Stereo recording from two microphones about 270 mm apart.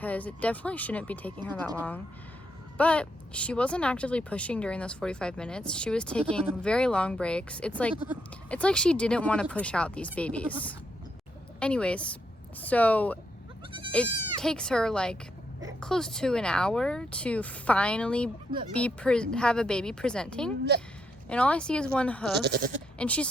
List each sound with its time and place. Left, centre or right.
0.0 s speech: centre
7.9 s speech: centre
8.4 s speech: centre
22.4 s speech: right
23.0 s speech: centre